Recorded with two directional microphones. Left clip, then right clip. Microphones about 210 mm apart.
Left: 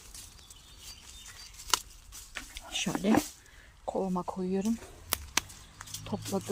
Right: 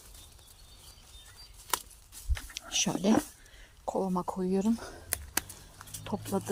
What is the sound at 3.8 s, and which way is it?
Speech, centre (ahead or behind).